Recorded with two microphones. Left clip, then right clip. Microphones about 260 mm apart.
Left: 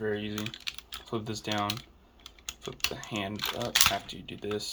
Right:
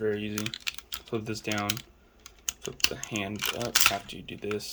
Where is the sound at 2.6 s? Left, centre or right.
Centre.